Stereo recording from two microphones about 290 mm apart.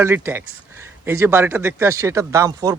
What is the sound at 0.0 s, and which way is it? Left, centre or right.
Speech, centre.